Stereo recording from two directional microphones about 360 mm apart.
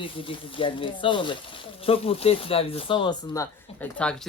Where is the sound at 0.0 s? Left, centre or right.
Centre.